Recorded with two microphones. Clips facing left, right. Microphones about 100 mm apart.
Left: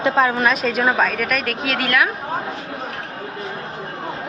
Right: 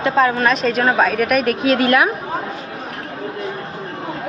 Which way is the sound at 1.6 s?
25° right (ahead or behind).